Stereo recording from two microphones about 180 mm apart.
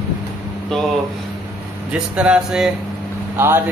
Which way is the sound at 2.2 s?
5° right (ahead or behind).